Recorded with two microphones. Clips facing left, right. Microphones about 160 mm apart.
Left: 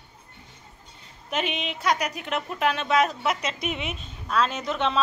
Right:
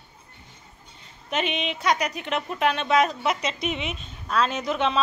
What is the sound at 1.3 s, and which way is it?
A woman's voice, 5° left (ahead or behind).